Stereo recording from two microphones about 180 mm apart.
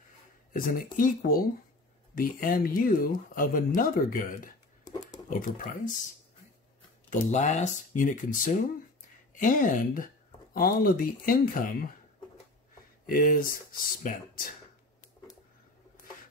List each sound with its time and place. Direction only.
0.5 s speech: 50° left (ahead or behind)
7.1 s speech: 40° left (ahead or behind)
13.0 s speech: 50° left (ahead or behind)